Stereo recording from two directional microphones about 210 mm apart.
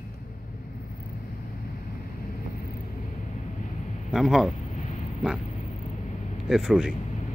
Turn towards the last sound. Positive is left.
turn(degrees=0)  # may be behind; listen again after turning